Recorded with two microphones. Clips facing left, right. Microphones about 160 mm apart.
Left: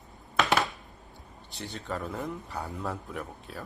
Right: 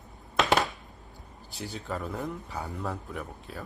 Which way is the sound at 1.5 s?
5° right (ahead or behind).